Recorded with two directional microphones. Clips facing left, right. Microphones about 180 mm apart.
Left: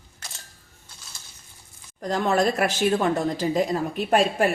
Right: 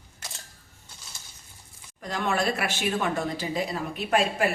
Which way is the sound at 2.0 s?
40° left (ahead or behind).